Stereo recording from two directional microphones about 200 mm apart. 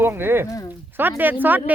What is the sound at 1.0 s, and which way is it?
Speech, 10° right (ahead or behind).